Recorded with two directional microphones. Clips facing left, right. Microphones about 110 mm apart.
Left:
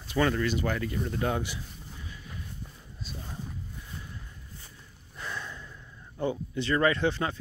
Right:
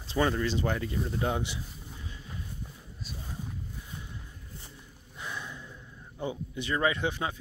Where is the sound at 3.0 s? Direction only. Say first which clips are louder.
Left 1 dB; 5° right (ahead or behind).